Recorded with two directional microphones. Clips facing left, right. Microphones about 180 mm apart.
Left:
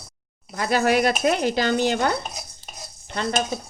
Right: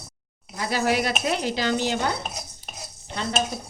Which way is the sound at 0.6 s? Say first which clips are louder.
Left 4 dB; 55° left (ahead or behind).